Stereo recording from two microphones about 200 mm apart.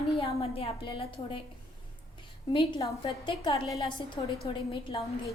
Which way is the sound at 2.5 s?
25° left (ahead or behind).